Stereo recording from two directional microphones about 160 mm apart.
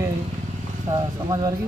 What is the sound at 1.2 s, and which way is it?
Speech, 30° right (ahead or behind).